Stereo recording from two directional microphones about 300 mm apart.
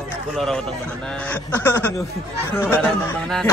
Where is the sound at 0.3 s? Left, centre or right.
Centre.